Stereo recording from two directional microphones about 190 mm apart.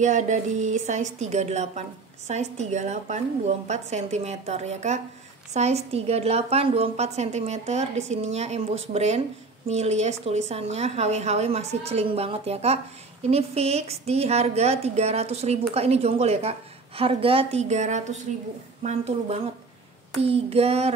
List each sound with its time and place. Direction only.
0.0 s a woman's voice: 40° right (ahead or behind)